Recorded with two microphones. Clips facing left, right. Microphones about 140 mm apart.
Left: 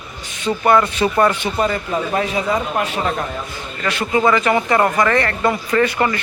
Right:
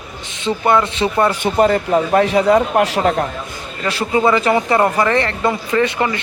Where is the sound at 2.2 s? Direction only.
65° right (ahead or behind).